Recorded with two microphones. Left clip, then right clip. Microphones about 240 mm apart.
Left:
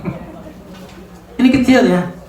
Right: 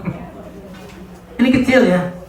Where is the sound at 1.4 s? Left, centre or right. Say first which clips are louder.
Left 1 dB; left.